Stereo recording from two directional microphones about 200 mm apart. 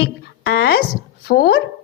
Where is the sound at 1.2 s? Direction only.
50° left (ahead or behind).